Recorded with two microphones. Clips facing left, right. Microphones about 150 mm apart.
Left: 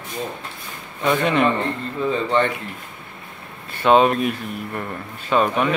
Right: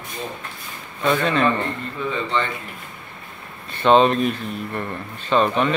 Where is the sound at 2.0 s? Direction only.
35° left (ahead or behind).